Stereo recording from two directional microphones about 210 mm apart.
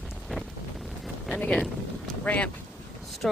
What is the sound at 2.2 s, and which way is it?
Speech, 5° left (ahead or behind).